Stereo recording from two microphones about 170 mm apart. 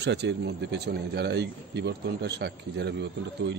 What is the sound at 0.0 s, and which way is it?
Speech, 90° right.